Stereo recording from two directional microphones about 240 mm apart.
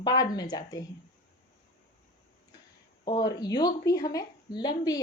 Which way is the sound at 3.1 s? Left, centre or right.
Centre.